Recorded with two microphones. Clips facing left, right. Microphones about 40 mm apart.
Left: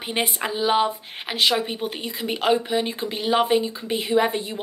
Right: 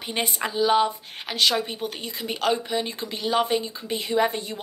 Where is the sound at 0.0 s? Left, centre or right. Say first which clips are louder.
Left 2 dB; centre.